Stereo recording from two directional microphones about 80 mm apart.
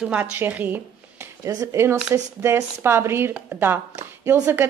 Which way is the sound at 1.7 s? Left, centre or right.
Right.